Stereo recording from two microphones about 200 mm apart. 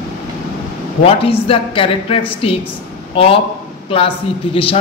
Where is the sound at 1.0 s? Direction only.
30° left (ahead or behind).